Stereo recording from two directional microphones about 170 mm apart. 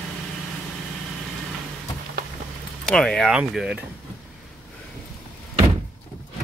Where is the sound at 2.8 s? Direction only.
5° left (ahead or behind).